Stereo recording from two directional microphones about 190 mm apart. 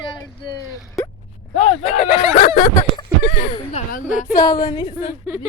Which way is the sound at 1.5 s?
35° left (ahead or behind).